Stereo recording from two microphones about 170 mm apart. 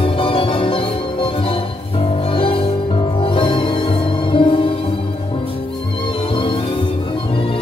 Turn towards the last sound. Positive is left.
turn(degrees=30)  # may be behind; listen again after turning